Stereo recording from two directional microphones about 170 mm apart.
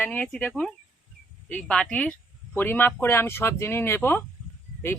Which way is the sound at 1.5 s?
5° left (ahead or behind).